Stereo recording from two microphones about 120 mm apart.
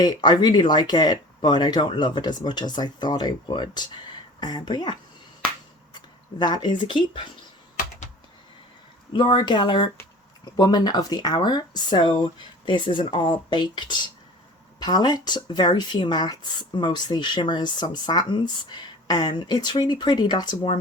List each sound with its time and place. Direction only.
0.0 s speech: 35° left (ahead or behind)
6.4 s speech: 40° left (ahead or behind)
9.1 s speech: 40° left (ahead or behind)